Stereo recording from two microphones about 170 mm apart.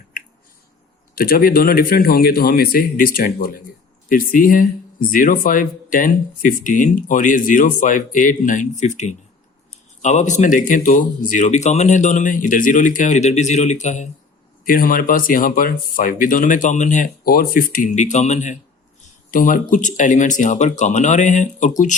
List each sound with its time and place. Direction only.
1.1 s a man's voice: 60° left (ahead or behind)
14.6 s speech: 55° left (ahead or behind)